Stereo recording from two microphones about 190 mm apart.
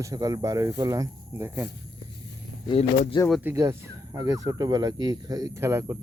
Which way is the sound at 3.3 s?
Centre (ahead or behind).